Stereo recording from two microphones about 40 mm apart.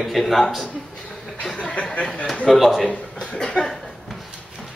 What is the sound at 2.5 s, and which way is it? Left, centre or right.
Speech, centre.